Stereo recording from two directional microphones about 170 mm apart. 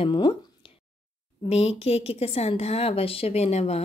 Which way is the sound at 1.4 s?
35° left (ahead or behind).